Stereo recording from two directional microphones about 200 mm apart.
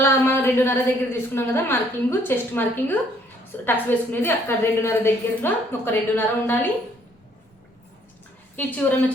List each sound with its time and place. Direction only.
0.0 s a woman's voice: 10° left (ahead or behind)
8.5 s a woman's voice: 5° left (ahead or behind)